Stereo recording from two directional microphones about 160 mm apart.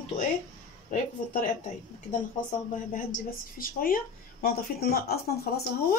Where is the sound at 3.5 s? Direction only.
60° left (ahead or behind).